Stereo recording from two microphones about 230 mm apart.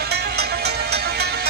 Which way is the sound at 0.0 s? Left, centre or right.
Right.